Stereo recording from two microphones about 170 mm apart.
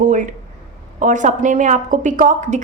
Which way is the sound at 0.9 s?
45° right (ahead or behind).